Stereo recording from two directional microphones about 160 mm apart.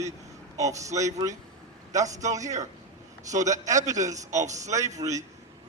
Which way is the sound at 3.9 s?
20° right (ahead or behind).